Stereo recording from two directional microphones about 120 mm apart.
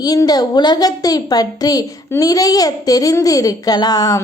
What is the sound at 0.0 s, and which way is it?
A woman's voice, 30° left (ahead or behind).